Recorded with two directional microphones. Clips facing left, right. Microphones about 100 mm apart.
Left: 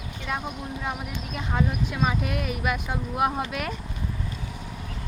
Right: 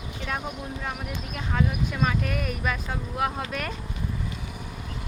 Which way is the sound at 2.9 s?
15° left (ahead or behind).